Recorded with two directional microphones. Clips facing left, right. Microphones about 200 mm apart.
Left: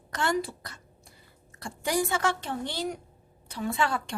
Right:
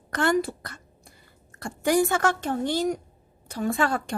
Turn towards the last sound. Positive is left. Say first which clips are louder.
# right 4 dB
turn(degrees=-45)  # may be behind; listen again after turning